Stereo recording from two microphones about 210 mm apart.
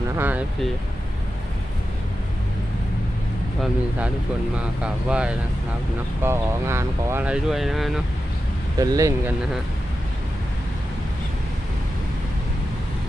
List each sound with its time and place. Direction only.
0.2 s speech: 10° right (ahead or behind)
4.5 s speech: 5° right (ahead or behind)
8.8 s speech: 15° right (ahead or behind)